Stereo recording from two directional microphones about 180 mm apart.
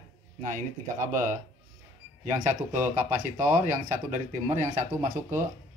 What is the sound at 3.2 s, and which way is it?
Speech, 45° right (ahead or behind).